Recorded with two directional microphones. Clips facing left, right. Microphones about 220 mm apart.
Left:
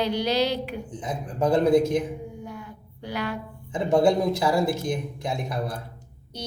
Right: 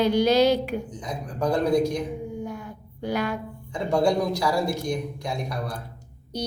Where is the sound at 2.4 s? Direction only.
45° right (ahead or behind).